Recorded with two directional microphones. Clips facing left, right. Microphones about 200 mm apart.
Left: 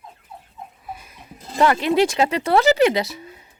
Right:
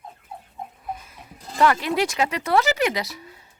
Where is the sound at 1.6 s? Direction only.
25° left (ahead or behind).